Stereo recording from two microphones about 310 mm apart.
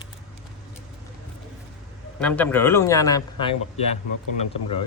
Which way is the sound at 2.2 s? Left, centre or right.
Centre.